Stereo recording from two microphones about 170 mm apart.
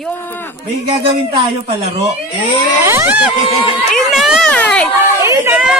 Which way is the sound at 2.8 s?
15° right (ahead or behind).